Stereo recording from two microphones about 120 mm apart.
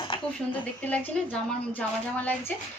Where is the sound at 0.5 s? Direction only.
15° left (ahead or behind).